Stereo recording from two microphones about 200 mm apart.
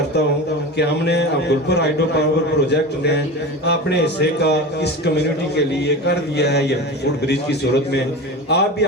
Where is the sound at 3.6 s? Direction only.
55° left (ahead or behind).